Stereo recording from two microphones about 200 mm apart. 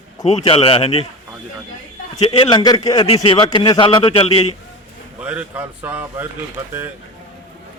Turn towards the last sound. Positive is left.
turn(degrees=-10)  # may be behind; listen again after turning